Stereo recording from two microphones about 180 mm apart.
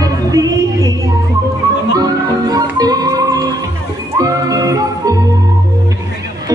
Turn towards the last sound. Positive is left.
turn(degrees=-20)  # may be behind; listen again after turning